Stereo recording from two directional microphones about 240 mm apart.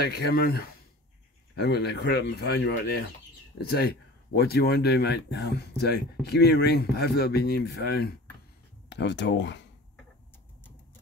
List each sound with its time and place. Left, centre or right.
0.2 s speech: left